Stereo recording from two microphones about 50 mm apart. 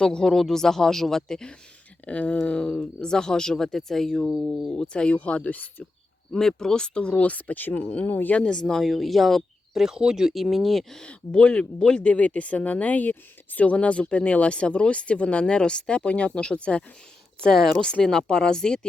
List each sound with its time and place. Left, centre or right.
0.0 s speech: centre
2.0 s speech: left; by 4.7 s centre
4.7 s speech: centre
5.1 s speech: left
6.3 s speech: centre; by 8.4 s left
8.4 s speech: centre
8.8 s speech: centre
9.8 s speech: centre
11.0 s speech: centre